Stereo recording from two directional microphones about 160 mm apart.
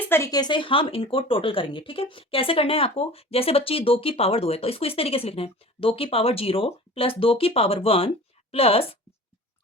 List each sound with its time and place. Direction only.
0.1 s speech: 20° left (ahead or behind); by 9.0 s 35° left (ahead or behind)